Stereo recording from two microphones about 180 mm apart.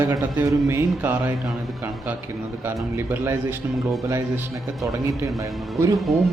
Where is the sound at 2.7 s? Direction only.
10° right (ahead or behind).